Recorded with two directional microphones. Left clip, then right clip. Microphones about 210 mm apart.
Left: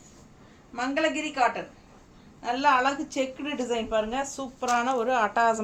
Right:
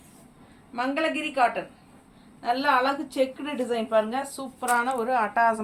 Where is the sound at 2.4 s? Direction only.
10° left (ahead or behind).